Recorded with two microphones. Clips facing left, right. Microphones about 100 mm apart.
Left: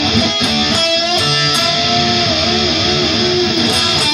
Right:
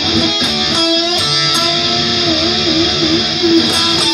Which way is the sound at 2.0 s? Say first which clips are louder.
Left 3 dB; 60° left (ahead or behind).